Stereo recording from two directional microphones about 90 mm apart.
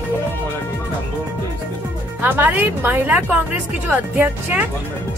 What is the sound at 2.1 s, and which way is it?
A woman's voice, 20° right (ahead or behind).